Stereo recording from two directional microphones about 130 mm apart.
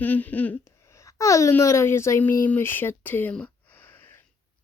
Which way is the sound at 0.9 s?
25° left (ahead or behind).